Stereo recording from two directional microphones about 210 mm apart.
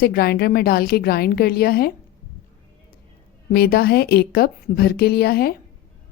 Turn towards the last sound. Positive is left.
turn(degrees=45)  # may be behind; listen again after turning